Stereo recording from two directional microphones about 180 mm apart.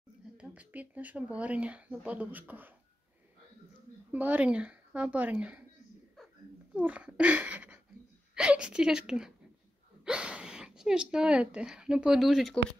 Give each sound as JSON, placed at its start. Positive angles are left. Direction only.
{"t": 0.4, "sound": "speech", "side_deg": -10}
{"t": 4.1, "sound": "speech", "side_deg": -10}
{"t": 6.7, "sound": "a child's voice", "side_deg": -5}